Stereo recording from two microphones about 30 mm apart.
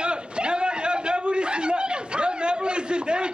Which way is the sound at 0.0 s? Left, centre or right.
Right.